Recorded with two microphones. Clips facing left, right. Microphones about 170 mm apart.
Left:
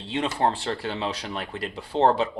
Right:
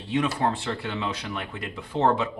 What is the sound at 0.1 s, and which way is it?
Speech, 30° left (ahead or behind).